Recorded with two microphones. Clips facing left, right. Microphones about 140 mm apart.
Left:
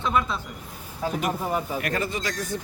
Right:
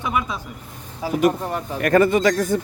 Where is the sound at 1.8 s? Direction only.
55° right (ahead or behind).